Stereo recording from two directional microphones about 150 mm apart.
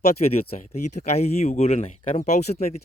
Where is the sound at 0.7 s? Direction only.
45° left (ahead or behind).